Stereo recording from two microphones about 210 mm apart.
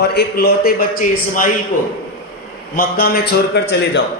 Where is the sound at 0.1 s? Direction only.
50° left (ahead or behind).